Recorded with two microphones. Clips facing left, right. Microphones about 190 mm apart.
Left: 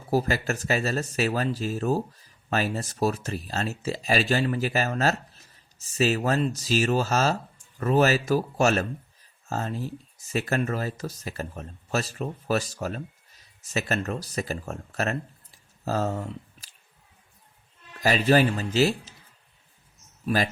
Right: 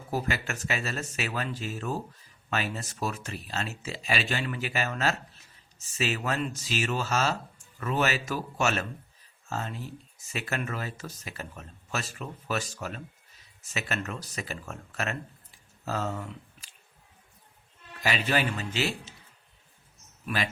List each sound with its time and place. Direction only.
0.1 s speech: 35° left (ahead or behind)
18.0 s speech: 40° left (ahead or behind)
20.2 s speech: 40° left (ahead or behind)